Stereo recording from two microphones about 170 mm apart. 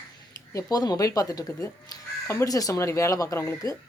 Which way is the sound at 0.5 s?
20° left (ahead or behind).